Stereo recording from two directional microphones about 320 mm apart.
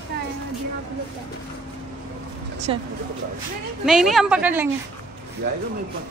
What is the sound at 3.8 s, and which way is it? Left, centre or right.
Speech, centre.